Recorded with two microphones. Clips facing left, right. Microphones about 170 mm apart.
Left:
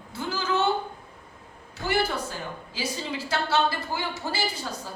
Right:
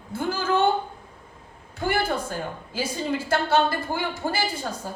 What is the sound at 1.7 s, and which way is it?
A woman's voice, 50° right (ahead or behind).